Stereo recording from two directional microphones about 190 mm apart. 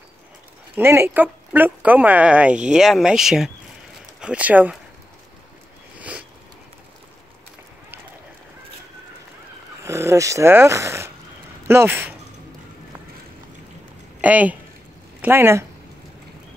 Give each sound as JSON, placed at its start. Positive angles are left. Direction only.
{"t": 0.7, "sound": "speech", "side_deg": -15}
{"t": 5.9, "sound": "a sound", "side_deg": -5}
{"t": 9.8, "sound": "speech", "side_deg": -15}
{"t": 14.2, "sound": "speech", "side_deg": -10}